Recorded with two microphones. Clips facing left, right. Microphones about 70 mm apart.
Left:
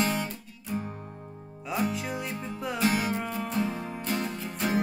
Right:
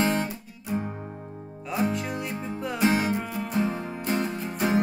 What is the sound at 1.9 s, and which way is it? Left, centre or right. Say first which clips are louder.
Music: right 2 dB; centre.